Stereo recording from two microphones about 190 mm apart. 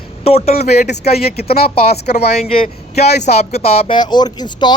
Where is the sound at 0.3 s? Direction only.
30° left (ahead or behind).